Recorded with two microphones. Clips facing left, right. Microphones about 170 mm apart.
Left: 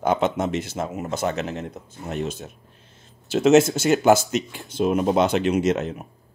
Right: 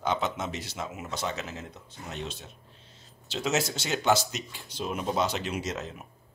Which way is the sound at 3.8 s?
50° left (ahead or behind).